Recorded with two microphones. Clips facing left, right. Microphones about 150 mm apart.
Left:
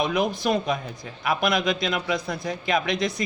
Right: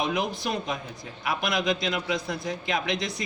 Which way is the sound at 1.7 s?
60° left (ahead or behind).